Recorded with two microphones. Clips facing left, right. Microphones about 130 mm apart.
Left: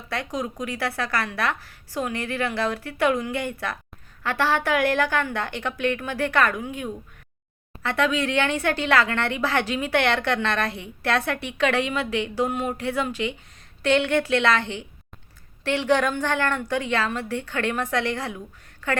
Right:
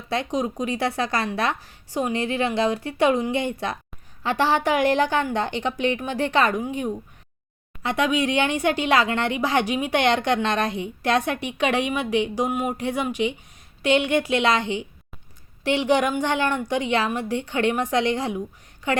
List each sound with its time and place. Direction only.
0.1 s speech: 20° right (ahead or behind)